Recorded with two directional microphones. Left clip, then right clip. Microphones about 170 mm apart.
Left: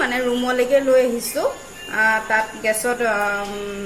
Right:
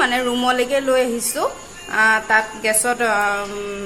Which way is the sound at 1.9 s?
30° right (ahead or behind).